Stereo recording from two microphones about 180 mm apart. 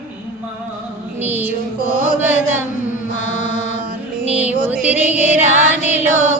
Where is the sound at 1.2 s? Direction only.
10° right (ahead or behind).